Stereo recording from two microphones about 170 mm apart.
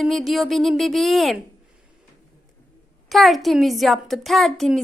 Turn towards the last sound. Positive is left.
turn(degrees=0)  # may be behind; listen again after turning